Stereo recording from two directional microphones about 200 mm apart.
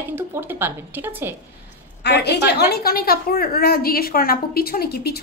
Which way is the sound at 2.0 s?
55° left (ahead or behind).